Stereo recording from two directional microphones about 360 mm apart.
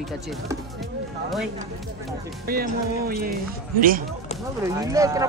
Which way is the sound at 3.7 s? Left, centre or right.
Right.